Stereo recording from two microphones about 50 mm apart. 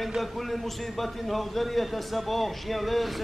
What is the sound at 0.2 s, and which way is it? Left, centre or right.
A man's voice, centre.